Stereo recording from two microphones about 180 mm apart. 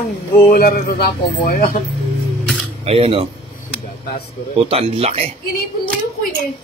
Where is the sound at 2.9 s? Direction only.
30° right (ahead or behind).